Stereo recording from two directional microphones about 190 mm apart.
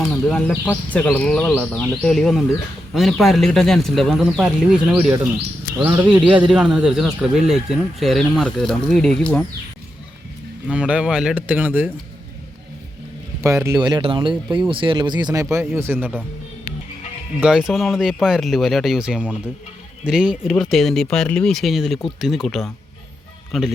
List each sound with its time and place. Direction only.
0.0 s speech: 5° left (ahead or behind)
10.7 s speech: 5° right (ahead or behind)
13.4 s speech: 15° right (ahead or behind)
17.4 s speech: 5° right (ahead or behind)